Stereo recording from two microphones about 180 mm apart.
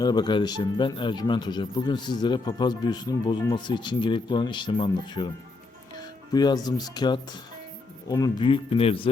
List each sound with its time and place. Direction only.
0.0 s speech: 25° left (ahead or behind)
6.3 s speech: 20° left (ahead or behind)